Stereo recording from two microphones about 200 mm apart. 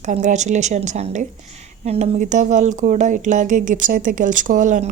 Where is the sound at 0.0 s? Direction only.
35° right (ahead or behind).